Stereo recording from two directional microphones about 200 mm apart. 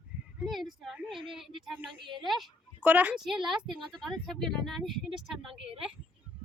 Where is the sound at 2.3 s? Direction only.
5° right (ahead or behind).